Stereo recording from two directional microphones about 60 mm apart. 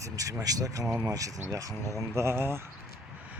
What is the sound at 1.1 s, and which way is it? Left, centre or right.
Speech, right.